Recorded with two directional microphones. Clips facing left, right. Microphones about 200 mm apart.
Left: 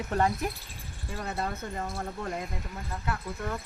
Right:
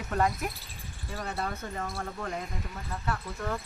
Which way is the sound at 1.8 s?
20° left (ahead or behind).